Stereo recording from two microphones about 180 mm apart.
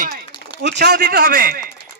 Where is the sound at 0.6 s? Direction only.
70° right (ahead or behind).